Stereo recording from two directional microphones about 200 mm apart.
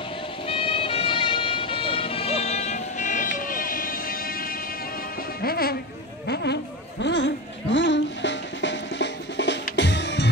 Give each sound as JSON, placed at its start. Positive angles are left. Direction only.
{"t": 0.5, "sound": "music", "side_deg": 25}
{"t": 5.4, "sound": "speech", "side_deg": 50}
{"t": 6.2, "sound": "a sound", "side_deg": 55}